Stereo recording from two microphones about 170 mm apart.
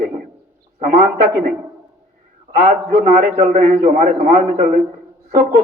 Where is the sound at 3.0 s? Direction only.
35° right (ahead or behind).